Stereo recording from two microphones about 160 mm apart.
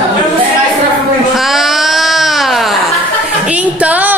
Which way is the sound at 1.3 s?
Centre (ahead or behind).